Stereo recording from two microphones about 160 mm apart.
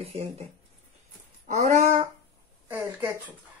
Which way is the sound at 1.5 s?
45° right (ahead or behind).